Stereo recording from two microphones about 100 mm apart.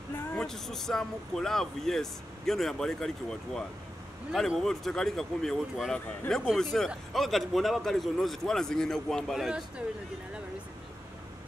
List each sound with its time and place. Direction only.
0.5 s speech: 5° left (ahead or behind)